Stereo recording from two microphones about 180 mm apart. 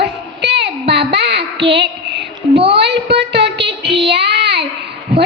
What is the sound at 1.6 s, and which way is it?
Speech, 75° right (ahead or behind).